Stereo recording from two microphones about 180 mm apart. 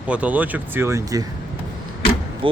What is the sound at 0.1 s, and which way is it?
A man's voice, 10° right (ahead or behind).